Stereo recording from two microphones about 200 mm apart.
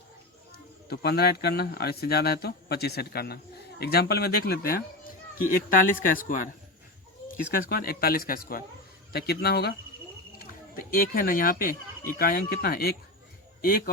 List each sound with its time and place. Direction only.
0.9 s speech: 50° left (ahead or behind)
7.5 s speech: 50° left (ahead or behind)